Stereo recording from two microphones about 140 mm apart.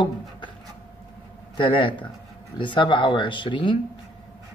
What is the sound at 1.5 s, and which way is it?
Speech, 35° left (ahead or behind).